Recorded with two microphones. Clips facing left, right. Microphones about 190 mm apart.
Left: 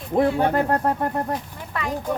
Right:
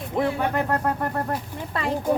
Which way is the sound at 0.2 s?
35° left (ahead or behind).